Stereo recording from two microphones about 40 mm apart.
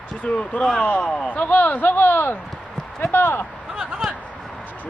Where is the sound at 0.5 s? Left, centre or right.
Left.